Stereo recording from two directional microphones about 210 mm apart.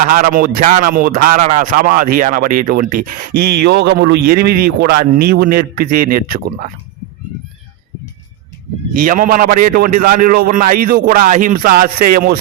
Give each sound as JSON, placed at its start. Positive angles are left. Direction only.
{"t": 0.1, "sound": "speech", "side_deg": -40}
{"t": 9.0, "sound": "a man's voice", "side_deg": -40}